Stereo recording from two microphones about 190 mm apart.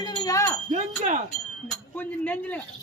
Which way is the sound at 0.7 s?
35° right (ahead or behind).